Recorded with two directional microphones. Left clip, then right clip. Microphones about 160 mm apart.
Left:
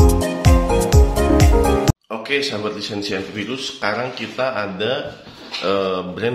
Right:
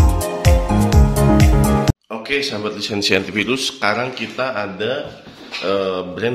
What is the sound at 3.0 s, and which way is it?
Speech, 40° right (ahead or behind).